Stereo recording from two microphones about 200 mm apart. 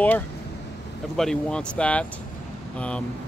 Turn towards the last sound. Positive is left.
turn(degrees=5)  # may be behind; listen again after turning